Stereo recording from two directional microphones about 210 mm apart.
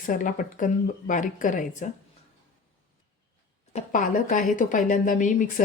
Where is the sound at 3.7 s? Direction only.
35° left (ahead or behind).